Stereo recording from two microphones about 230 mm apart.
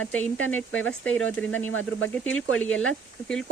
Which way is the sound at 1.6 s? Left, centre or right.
Left.